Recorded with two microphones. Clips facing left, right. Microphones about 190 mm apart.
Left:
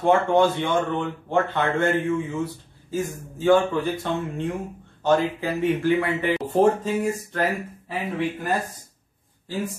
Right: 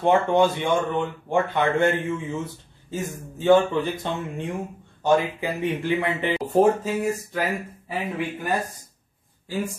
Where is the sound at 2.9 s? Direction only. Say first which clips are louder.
Left 3 dB; 20° right (ahead or behind).